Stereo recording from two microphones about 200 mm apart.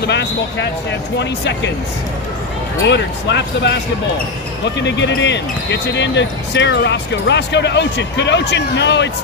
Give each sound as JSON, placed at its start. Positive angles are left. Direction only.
{"t": 1.2, "sound": "speech", "side_deg": 60}
{"t": 2.8, "sound": "speech", "side_deg": 60}
{"t": 4.8, "sound": "speech", "side_deg": 60}